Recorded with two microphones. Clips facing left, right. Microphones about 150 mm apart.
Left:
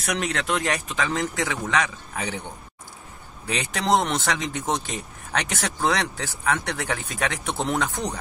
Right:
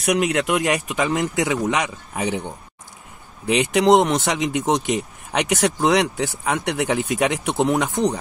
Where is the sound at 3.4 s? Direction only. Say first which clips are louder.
Right 8 dB; 15° right (ahead or behind).